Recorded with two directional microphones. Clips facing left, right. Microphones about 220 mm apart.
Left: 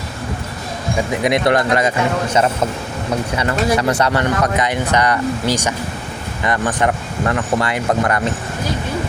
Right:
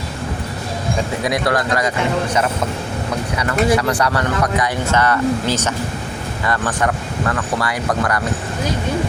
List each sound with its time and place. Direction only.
1.2 s speech: 20° left (ahead or behind)
3.3 s speech: 25° left (ahead or behind)